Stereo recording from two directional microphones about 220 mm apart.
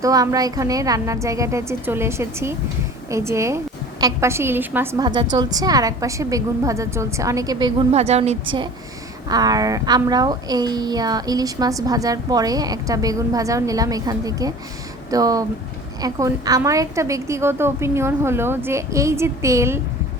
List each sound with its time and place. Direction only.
0.0 s a woman's voice: 15° right (ahead or behind)
7.9 s a woman's voice: 30° right (ahead or behind)
9.3 s a woman's voice: 15° right (ahead or behind)